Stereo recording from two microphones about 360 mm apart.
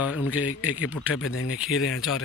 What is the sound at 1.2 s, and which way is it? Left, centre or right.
Speech, left.